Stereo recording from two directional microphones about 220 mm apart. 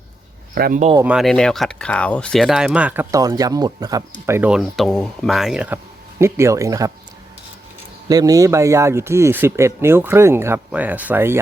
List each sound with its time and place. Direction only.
0.5 s speech: 40° right (ahead or behind)
1.0 s speech: centre (ahead or behind)
8.0 s a man's voice: 15° right (ahead or behind)